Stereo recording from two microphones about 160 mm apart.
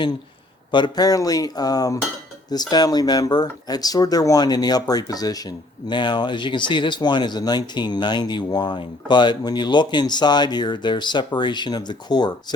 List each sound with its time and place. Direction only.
0.7 s speech: 25° left (ahead or behind)